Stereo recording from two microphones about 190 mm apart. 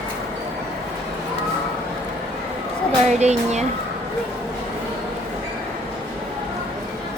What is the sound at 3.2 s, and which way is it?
Speech, 35° right (ahead or behind).